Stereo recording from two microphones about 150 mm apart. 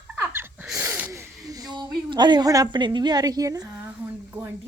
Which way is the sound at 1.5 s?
25° right (ahead or behind).